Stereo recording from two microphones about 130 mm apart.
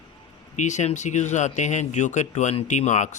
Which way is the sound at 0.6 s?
65° left (ahead or behind).